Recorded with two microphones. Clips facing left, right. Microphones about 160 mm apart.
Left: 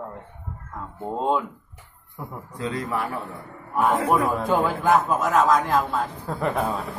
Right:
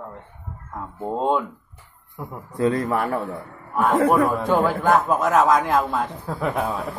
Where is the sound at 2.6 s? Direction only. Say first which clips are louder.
Right 7 dB; 55° right (ahead or behind).